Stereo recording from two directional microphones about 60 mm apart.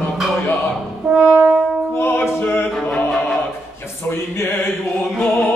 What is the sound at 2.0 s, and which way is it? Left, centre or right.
Music, left.